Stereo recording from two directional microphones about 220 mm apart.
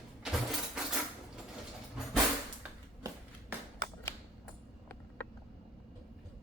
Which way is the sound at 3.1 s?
15° right (ahead or behind).